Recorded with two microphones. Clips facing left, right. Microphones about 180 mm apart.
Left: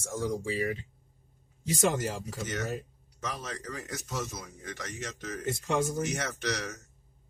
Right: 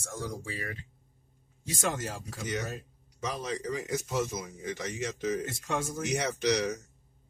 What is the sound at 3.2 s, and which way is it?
Speech, 10° right (ahead or behind).